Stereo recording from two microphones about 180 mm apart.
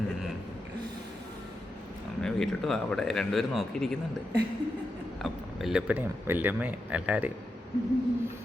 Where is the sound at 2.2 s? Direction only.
Centre (ahead or behind).